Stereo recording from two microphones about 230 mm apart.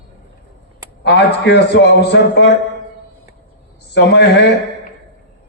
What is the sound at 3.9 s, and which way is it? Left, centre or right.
Speech, left.